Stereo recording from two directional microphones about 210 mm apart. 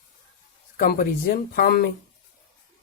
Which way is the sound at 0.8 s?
45° left (ahead or behind).